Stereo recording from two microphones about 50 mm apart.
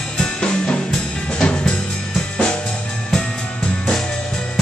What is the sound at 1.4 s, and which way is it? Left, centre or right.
Drum kit, left.